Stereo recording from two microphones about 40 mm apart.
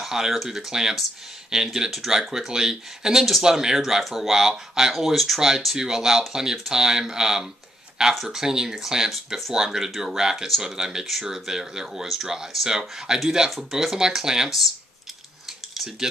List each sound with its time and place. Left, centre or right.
0.3 s speech: centre
0.7 s speech: centre
3.4 s speech: centre
3.8 s speech: centre
13.5 s speech: centre
13.7 s speech: centre
15.7 s speech: centre